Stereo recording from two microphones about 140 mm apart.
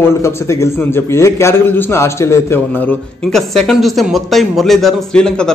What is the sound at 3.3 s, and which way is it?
Speech, centre (ahead or behind).